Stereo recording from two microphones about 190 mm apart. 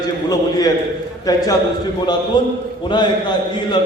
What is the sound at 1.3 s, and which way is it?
A man's voice, 20° left (ahead or behind).